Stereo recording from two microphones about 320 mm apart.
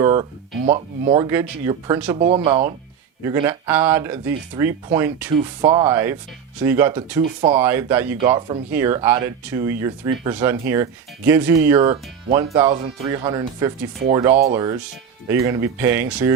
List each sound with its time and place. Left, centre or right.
0.0 s speech: centre
7.4 s speech: centre
7.7 s speech: centre